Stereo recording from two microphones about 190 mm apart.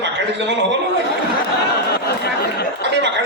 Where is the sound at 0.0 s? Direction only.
70° right (ahead or behind).